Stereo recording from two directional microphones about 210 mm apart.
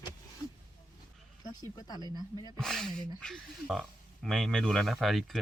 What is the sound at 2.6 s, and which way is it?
Speech, centre (ahead or behind).